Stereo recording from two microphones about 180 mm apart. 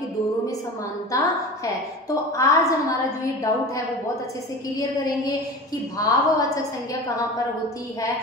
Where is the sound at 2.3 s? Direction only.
20° left (ahead or behind).